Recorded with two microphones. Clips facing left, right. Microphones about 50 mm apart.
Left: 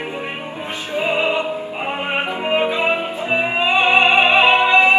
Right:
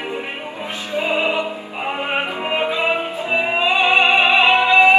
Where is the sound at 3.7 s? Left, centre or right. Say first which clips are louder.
Left 1 dB; left.